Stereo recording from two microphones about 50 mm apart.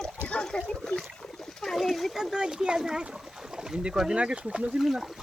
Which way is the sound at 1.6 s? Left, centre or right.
Centre.